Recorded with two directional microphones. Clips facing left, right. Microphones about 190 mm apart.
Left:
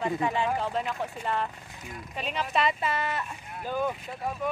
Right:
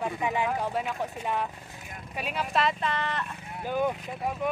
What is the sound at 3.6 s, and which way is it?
Speech, 15° right (ahead or behind).